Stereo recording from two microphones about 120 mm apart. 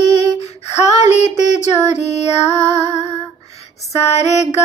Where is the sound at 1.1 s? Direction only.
75° left (ahead or behind).